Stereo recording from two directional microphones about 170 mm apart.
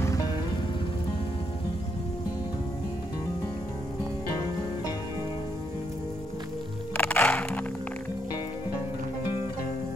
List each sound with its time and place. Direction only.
0.0 s music: 20° left (ahead or behind)
7.0 s music: 10° left (ahead or behind)